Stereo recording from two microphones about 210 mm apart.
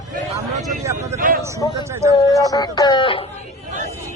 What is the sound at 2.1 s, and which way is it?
Speech, 15° left (ahead or behind).